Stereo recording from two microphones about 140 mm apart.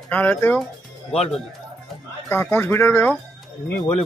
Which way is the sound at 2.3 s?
15° left (ahead or behind).